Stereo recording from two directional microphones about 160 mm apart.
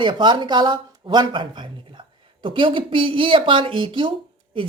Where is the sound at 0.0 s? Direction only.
30° right (ahead or behind).